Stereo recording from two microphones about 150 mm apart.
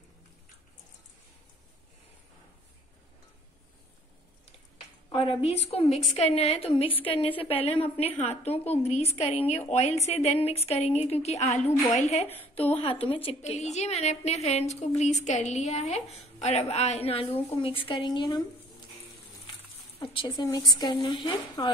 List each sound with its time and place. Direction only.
5.1 s a woman's voice: 40° left (ahead or behind)
12.3 s a woman's voice: 15° left (ahead or behind)
12.6 s a woman's voice: 45° left (ahead or behind)
20.0 s a woman's voice: 35° left (ahead or behind)